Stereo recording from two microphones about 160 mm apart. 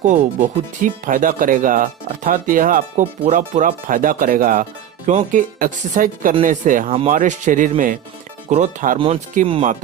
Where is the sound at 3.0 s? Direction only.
50° right (ahead or behind).